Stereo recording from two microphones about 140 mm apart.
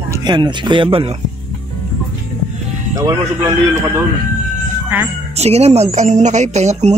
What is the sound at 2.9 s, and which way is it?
Speech, 30° right (ahead or behind).